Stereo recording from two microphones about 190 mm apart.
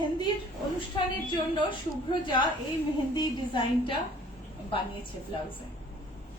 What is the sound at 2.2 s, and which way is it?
A woman's voice, 25° left (ahead or behind).